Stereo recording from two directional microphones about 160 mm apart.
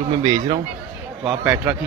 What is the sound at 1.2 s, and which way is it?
Speech, 5° right (ahead or behind).